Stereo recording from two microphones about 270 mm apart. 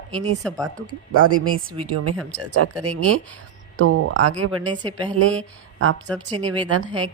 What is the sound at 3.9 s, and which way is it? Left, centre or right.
Speech, right.